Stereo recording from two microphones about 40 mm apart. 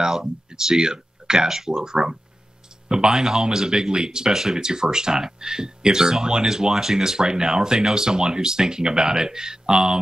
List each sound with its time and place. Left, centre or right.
0.0 s speech: centre